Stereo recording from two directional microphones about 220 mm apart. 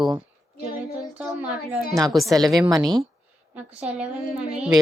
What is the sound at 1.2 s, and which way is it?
Speech, 5° right (ahead or behind).